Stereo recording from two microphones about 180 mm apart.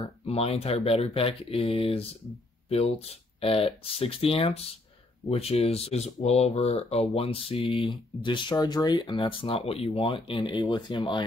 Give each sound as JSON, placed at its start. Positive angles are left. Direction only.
{"t": 0.2, "sound": "speech", "side_deg": 35}